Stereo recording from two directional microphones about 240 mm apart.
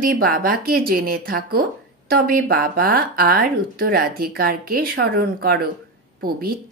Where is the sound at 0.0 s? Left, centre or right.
Right.